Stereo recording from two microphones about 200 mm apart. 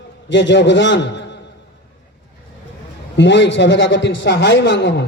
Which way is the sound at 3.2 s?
60° left (ahead or behind).